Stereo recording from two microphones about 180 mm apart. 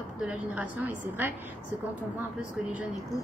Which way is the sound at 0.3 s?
10° right (ahead or behind).